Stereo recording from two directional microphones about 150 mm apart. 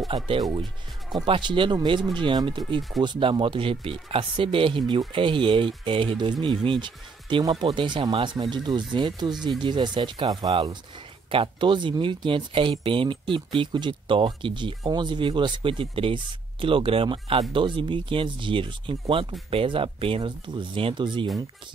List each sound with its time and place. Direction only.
0.1 s speech: 30° right (ahead or behind)